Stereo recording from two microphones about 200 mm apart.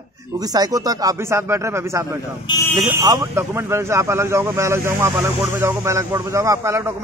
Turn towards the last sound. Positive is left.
turn(degrees=-15)  # may be behind; listen again after turning